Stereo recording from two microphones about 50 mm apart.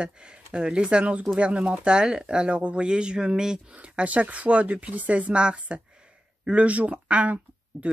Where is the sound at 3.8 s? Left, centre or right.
Right.